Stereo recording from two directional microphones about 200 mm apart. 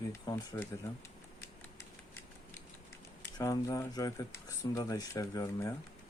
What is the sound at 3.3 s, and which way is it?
Speech, 20° left (ahead or behind).